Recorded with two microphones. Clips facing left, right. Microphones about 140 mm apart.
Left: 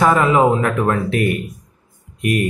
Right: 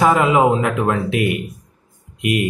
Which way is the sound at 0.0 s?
15° right (ahead or behind).